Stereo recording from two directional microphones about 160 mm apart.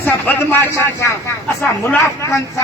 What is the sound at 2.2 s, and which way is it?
Speech, 20° left (ahead or behind).